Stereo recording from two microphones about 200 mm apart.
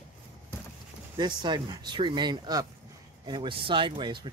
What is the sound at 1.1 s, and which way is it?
Speech, 20° right (ahead or behind).